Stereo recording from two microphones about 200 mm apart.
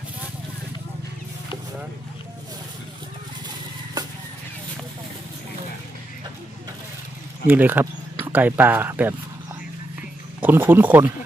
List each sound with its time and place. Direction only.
7.4 s speech: 10° right (ahead or behind)
10.4 s speech: 10° right (ahead or behind)